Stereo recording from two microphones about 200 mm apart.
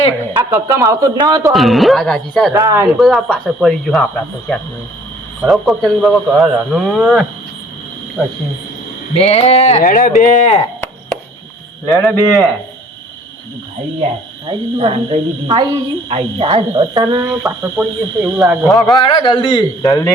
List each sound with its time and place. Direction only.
0.3 s speech: 10° right (ahead or behind)
1.5 s speech: centre (ahead or behind)
2.5 s speech: 10° right (ahead or behind)
3.0 s speech: centre (ahead or behind)
9.1 s speech: 30° left (ahead or behind)
11.9 s a man's voice: 15° left (ahead or behind)
14.4 s speech: 25° right (ahead or behind)
17.2 s speech: 5° right (ahead or behind)
18.7 s a man's voice: 20° left (ahead or behind)